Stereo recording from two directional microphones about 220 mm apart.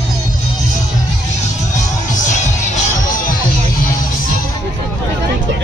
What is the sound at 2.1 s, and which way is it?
Music, 35° left (ahead or behind).